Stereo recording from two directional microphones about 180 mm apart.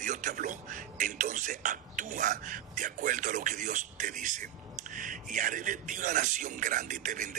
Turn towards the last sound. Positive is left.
turn(degrees=-45)  # may be behind; listen again after turning